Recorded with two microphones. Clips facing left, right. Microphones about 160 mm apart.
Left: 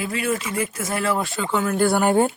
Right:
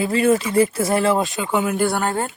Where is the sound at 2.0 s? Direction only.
10° left (ahead or behind).